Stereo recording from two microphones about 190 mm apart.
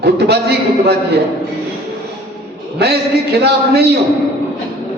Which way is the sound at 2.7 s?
60° right (ahead or behind).